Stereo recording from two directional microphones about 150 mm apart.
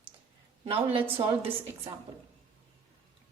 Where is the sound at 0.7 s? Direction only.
40° right (ahead or behind).